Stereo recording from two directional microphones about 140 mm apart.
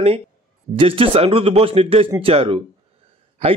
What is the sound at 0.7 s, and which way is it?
A man's voice, 40° right (ahead or behind).